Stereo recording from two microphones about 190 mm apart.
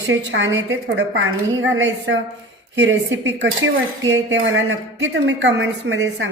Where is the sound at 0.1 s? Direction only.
75° right (ahead or behind).